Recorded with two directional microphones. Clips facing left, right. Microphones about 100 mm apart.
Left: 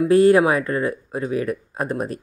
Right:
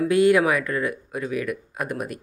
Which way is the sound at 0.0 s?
35° left (ahead or behind).